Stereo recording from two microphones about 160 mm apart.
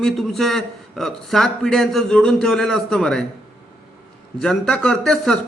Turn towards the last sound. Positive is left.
turn(degrees=0)  # may be behind; listen again after turning